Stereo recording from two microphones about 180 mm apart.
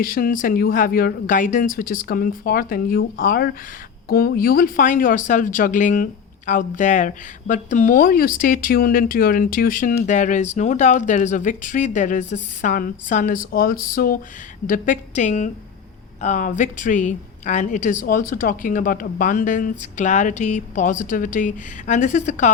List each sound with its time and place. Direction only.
0.0 s speech: 50° left (ahead or behind)